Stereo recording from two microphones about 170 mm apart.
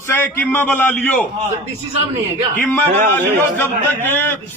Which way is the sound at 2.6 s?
10° left (ahead or behind).